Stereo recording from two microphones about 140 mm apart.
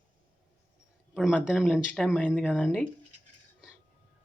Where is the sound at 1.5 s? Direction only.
Centre (ahead or behind).